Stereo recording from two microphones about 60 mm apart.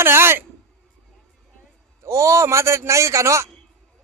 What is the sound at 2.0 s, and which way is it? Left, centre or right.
A man's voice, right.